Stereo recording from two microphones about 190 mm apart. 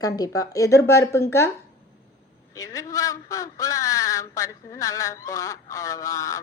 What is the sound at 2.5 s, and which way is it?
A woman's voice, 15° left (ahead or behind).